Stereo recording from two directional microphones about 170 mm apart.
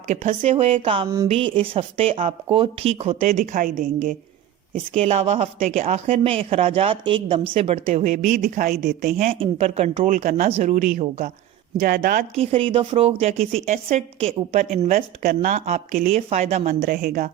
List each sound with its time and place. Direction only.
0.1 s a woman's voice: 40° right (ahead or behind)
4.9 s a woman's voice: 35° right (ahead or behind)
5.5 s a woman's voice: 50° right (ahead or behind)
9.3 s speech: 35° right (ahead or behind)
11.8 s a woman's voice: 60° right (ahead or behind)
12.4 s a woman's voice: 35° right (ahead or behind)
14.9 s a woman's voice: 60° right (ahead or behind); by 16.7 s 40° right (ahead or behind)
16.8 s a woman's voice: 60° right (ahead or behind)